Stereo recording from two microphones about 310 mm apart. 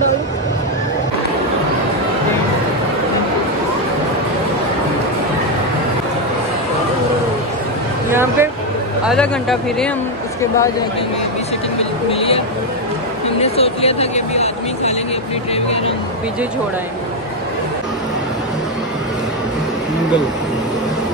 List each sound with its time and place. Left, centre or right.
8.1 s a sound: centre
9.0 s speech: centre
12.1 s speech: centre
13.4 s speech: centre